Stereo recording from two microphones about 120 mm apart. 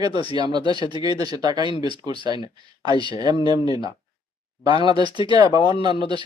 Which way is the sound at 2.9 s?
35° right (ahead or behind).